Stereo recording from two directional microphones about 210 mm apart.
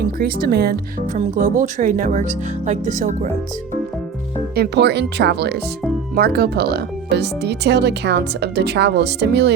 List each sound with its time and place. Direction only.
0.0 s speech: 45° right (ahead or behind)
4.5 s speech: 50° right (ahead or behind)